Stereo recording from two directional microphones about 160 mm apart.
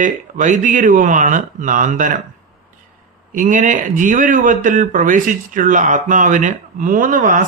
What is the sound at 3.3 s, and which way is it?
Speech, 55° right (ahead or behind).